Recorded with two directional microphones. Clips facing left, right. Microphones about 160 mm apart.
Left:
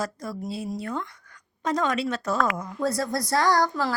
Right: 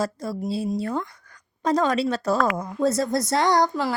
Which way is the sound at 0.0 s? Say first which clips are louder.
Right 4 dB; 30° right (ahead or behind).